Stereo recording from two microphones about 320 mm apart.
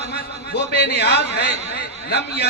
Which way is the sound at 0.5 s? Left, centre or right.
Left.